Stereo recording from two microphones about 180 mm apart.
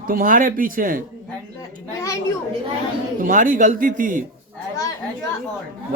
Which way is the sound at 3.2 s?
45° right (ahead or behind).